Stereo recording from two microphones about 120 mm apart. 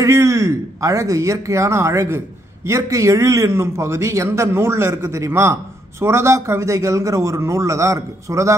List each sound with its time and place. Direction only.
0.0 s speech: 25° right (ahead or behind)